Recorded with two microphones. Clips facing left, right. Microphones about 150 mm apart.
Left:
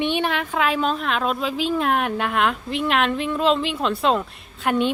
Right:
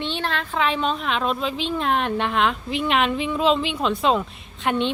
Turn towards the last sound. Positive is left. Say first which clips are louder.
# left 2 dB
turn(degrees=5)  # may be behind; listen again after turning